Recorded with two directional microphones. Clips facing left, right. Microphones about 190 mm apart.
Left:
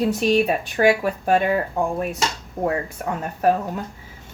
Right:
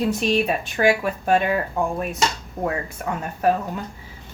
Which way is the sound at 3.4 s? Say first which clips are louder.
Left 1 dB; 40° left (ahead or behind).